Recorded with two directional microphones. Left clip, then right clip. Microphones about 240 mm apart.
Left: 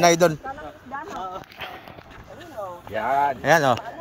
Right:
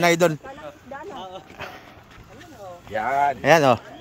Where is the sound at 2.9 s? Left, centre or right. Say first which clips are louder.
Right 1 dB; right.